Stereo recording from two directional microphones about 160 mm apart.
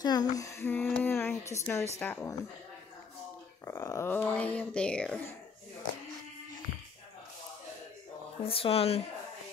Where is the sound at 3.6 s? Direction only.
20° left (ahead or behind).